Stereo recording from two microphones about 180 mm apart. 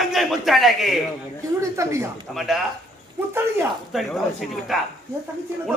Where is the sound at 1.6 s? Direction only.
15° right (ahead or behind).